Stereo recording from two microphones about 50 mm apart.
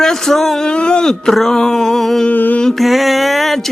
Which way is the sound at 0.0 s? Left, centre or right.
Centre.